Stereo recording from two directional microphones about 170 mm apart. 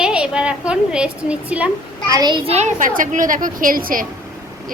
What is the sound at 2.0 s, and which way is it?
A child's voice, 25° right (ahead or behind).